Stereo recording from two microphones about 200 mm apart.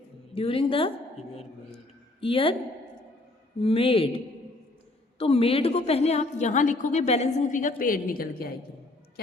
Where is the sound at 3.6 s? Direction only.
30° left (ahead or behind).